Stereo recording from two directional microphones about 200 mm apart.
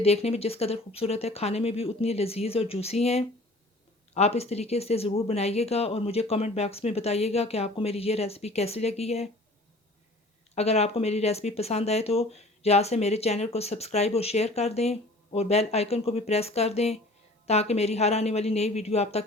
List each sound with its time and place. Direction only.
0.0 s speech: 30° left (ahead or behind)
10.5 s speech: 30° left (ahead or behind)